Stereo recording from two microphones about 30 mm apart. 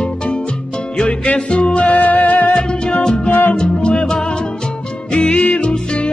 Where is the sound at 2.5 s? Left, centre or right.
Left.